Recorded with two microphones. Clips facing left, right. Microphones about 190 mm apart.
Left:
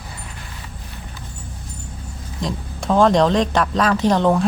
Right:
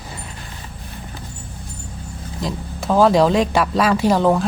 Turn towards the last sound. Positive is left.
turn(degrees=-5)  # may be behind; listen again after turning